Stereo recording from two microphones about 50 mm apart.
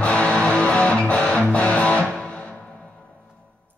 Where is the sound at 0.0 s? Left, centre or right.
Left.